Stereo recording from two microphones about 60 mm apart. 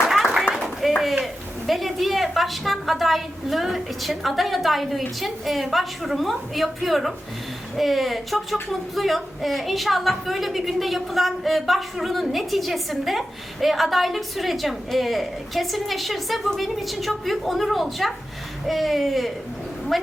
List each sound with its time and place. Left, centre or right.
0.5 s a woman's voice: centre